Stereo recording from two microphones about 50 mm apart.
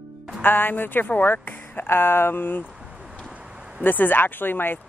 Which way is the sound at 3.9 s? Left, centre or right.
Left.